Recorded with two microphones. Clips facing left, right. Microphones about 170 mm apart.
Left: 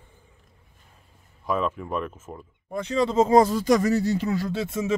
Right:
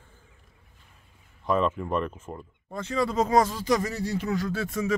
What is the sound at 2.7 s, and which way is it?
Speech, 20° left (ahead or behind).